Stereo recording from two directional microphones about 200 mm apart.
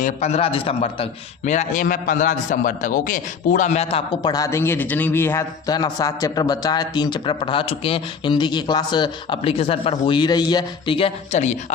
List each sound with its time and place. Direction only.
0.0 s speech: 35° left (ahead or behind)
1.5 s a man's voice: 40° left (ahead or behind)
4.2 s speech: 20° left (ahead or behind); by 11.5 s 35° left (ahead or behind)